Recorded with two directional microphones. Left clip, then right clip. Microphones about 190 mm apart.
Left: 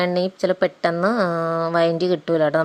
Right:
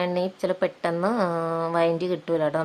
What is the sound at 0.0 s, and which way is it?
Speech, 25° left (ahead or behind).